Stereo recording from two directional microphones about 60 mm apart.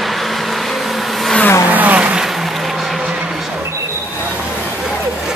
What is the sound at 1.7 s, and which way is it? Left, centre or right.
Vehicle, right.